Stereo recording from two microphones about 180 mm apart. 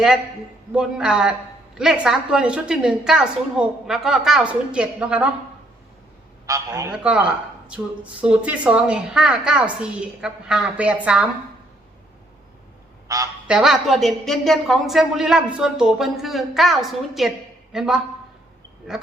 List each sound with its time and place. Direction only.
0.7 s a woman's voice: 5° right (ahead or behind)
6.4 s a man's voice: 20° right (ahead or behind)
6.9 s a woman's voice: 5° right (ahead or behind)
13.1 s speech: 20° right (ahead or behind)
13.5 s a woman's voice: centre (ahead or behind)